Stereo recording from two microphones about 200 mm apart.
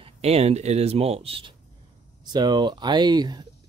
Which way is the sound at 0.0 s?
30° right (ahead or behind).